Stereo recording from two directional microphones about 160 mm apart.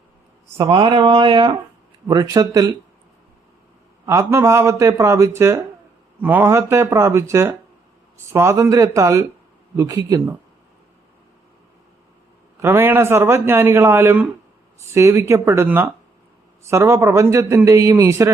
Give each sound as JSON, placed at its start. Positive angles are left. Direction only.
{"t": 0.7, "sound": "speech", "side_deg": -35}
{"t": 4.0, "sound": "speech", "side_deg": -20}
{"t": 12.6, "sound": "speech", "side_deg": -15}